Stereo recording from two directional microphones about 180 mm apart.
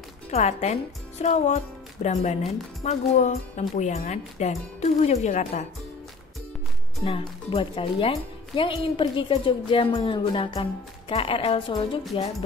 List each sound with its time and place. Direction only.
0.3 s speech: 40° left (ahead or behind)
7.1 s speech: 30° left (ahead or behind)